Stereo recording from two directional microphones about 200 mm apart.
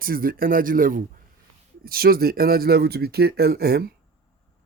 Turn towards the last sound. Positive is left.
turn(degrees=-50)  # may be behind; listen again after turning